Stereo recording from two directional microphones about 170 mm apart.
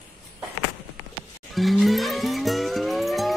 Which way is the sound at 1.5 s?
Centre (ahead or behind).